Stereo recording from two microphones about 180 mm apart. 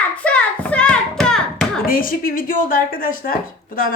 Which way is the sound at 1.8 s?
50° left (ahead or behind).